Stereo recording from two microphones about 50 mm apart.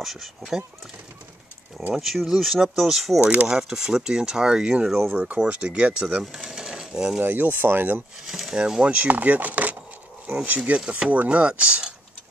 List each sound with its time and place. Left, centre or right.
0.0 s speech: centre
2.0 s speech: centre
3.2 s speech: right
3.4 s speech: centre
6.2 s a sound: centre
7.2 s speech: right
8.3 s speech: centre
8.5 s speech: centre
8.9 s speech: right
10.9 s speech: right